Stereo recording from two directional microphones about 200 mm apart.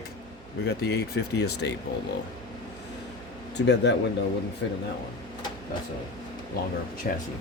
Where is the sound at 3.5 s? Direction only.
60° left (ahead or behind).